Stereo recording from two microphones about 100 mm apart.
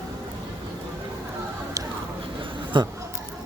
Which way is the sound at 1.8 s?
35° right (ahead or behind).